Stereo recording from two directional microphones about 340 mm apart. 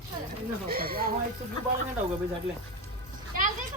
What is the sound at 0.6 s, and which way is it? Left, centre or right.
Speech, right.